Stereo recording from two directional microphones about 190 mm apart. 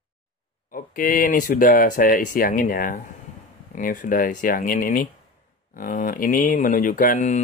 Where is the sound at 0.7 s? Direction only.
45° left (ahead or behind).